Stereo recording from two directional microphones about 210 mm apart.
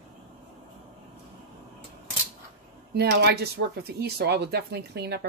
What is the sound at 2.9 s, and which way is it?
Speech, 50° right (ahead or behind).